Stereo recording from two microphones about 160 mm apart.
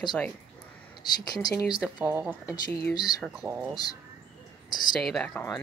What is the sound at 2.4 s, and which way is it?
Speech, 20° left (ahead or behind).